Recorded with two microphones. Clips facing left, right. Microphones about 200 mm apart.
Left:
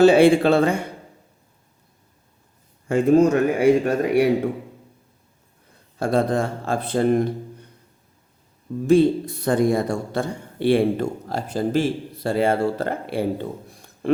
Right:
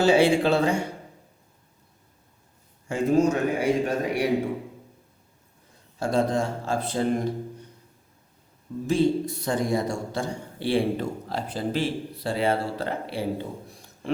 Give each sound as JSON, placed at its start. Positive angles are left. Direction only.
{"t": 0.0, "sound": "a man's voice", "side_deg": 55}
{"t": 2.9, "sound": "a man's voice", "side_deg": 60}
{"t": 6.0, "sound": "a man's voice", "side_deg": 55}
{"t": 8.9, "sound": "a man's voice", "side_deg": 55}